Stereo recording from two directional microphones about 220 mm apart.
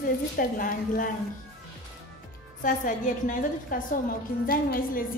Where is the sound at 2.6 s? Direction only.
35° left (ahead or behind).